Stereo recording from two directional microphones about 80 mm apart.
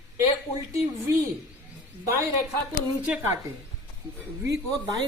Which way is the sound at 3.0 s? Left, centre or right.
Centre.